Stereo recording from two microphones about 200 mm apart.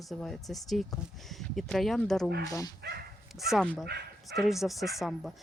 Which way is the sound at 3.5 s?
Centre (ahead or behind).